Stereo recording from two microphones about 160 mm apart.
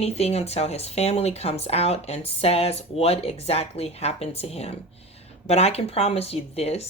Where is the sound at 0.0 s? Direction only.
40° left (ahead or behind).